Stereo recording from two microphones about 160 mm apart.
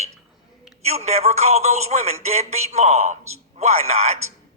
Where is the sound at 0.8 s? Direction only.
40° right (ahead or behind).